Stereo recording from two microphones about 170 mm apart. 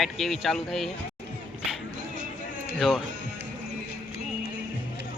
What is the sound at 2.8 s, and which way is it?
Speech, centre (ahead or behind).